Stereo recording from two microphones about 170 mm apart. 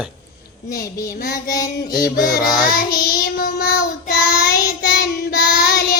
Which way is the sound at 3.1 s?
65° left (ahead or behind).